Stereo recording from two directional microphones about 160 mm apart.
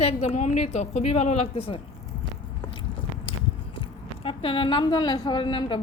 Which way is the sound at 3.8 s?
35° left (ahead or behind).